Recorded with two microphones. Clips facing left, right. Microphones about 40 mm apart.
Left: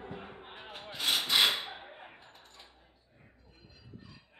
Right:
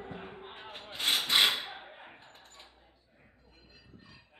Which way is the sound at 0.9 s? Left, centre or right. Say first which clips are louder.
Right 1 dB; right.